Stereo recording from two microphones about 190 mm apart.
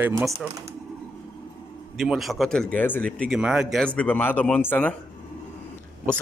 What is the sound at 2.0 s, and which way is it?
Speech, centre (ahead or behind).